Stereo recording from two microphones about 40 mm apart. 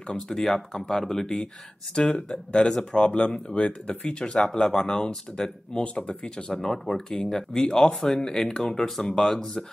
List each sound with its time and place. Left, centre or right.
0.3 s speech: centre
4.2 s speech: centre